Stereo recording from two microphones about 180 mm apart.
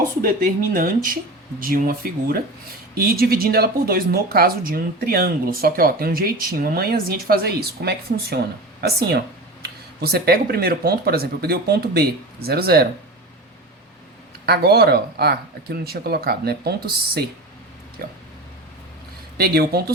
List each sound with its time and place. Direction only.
0.2 s speech: 50° right (ahead or behind)
14.4 s speech: 60° right (ahead or behind)
19.4 s speech: 60° right (ahead or behind)